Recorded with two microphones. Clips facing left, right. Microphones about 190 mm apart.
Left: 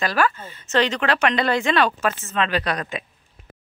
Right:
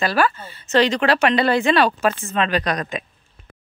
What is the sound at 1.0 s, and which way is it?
Speech, 35° right (ahead or behind).